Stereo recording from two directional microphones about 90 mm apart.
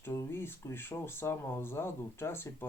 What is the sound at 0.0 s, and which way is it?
Speech, 25° left (ahead or behind).